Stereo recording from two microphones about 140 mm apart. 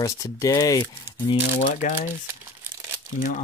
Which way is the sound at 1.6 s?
60° left (ahead or behind).